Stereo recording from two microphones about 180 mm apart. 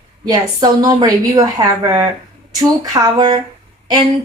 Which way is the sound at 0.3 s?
20° right (ahead or behind).